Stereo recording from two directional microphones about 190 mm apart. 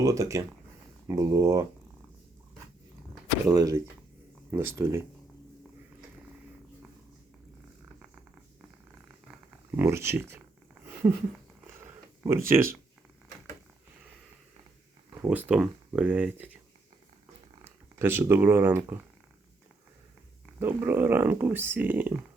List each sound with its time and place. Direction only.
0.0 s speech: 15° right (ahead or behind)
3.4 s speech: 20° right (ahead or behind)
9.7 s speech: 15° right (ahead or behind)
11.6 s a sound: 10° right (ahead or behind)
15.2 s speech: 10° right (ahead or behind)
17.6 s speech: 10° right (ahead or behind)
20.6 s speech: 10° right (ahead or behind)